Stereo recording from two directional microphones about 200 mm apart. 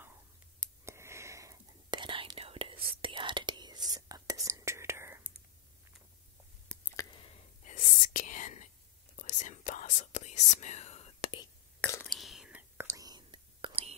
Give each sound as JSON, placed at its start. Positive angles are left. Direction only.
{"t": 0.6, "sound": "whispering", "side_deg": -15}
{"t": 6.7, "sound": "a sound", "side_deg": 10}
{"t": 7.6, "sound": "whispering", "side_deg": 40}
{"t": 11.8, "sound": "whispering", "side_deg": 10}